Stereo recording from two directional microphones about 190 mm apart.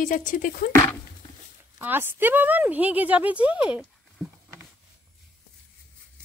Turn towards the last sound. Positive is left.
turn(degrees=-5)  # may be behind; listen again after turning